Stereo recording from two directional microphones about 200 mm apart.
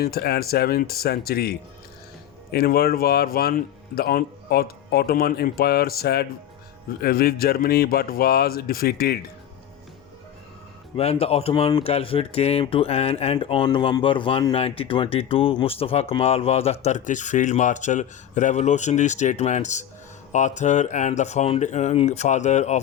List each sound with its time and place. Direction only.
0.0 s speech: 50° left (ahead or behind)
10.9 s speech: 30° left (ahead or behind)